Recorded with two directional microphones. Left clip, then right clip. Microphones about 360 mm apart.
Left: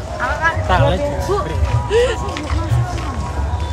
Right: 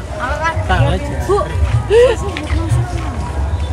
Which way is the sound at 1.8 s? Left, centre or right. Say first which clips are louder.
Right 6 dB; centre.